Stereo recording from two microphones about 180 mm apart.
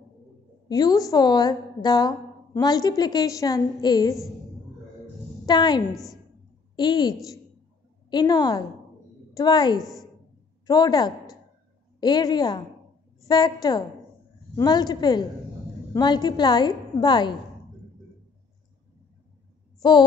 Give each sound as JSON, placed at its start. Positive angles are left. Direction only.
{"t": 0.7, "sound": "a woman's voice", "side_deg": 20}
{"t": 5.4, "sound": "a woman's voice", "side_deg": 25}
{"t": 19.8, "sound": "child singing", "side_deg": 25}